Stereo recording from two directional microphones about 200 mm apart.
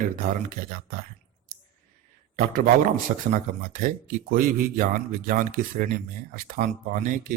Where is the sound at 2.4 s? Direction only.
45° right (ahead or behind).